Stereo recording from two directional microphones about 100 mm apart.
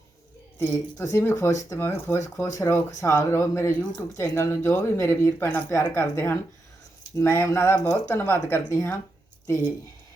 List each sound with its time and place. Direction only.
0.6 s speech: 20° left (ahead or behind)